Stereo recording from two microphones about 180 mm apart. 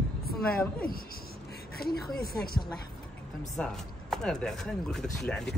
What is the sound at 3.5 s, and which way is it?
Speech, 5° left (ahead or behind).